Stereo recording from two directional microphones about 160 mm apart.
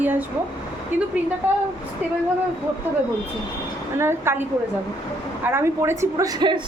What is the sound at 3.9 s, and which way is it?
Speech, 15° right (ahead or behind).